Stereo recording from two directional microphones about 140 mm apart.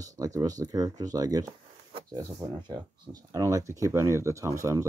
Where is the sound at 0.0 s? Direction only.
25° right (ahead or behind).